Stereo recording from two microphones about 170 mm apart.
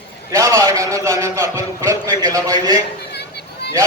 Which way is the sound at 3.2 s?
75° left (ahead or behind).